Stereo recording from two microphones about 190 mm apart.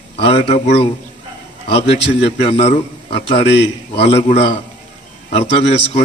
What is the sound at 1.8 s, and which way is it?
Speech, 65° left (ahead or behind).